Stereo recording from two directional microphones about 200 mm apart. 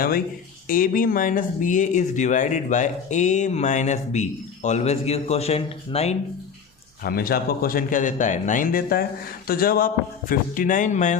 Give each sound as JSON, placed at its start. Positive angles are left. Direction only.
{"t": 0.7, "sound": "speech", "side_deg": 45}
{"t": 7.0, "sound": "speech", "side_deg": 50}